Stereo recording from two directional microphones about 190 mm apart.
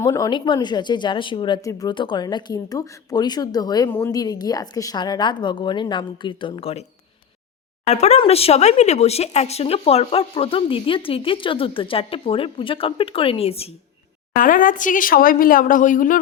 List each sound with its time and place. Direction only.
0.0 s speech: 15° left (ahead or behind)
7.9 s speech: 35° left (ahead or behind)
14.3 s a woman's voice: 45° left (ahead or behind)